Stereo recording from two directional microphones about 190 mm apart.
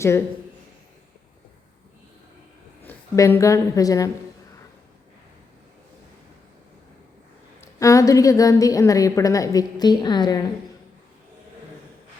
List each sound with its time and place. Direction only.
2.8 s a woman's voice: 15° left (ahead or behind)
7.8 s a woman's voice: 15° left (ahead or behind)